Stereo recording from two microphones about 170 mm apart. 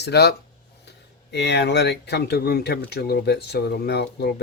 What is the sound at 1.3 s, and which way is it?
Speech, 85° left.